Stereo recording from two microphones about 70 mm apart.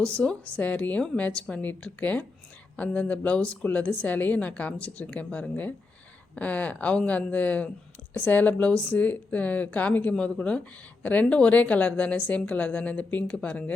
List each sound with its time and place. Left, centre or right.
0.0 s a woman's voice: centre